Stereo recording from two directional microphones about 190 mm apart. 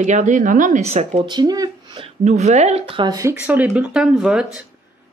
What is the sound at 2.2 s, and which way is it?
Speech, 40° right (ahead or behind).